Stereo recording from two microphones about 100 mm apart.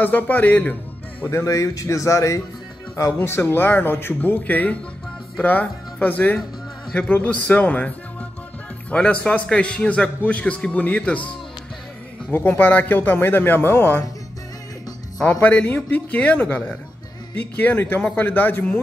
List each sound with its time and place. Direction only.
0.0 s a man's voice: 20° left (ahead or behind)
1.2 s a man's voice: 30° left (ahead or behind); by 11.2 s 15° left (ahead or behind)
12.3 s speech: 20° left (ahead or behind)
15.4 s a man's voice: 15° left (ahead or behind)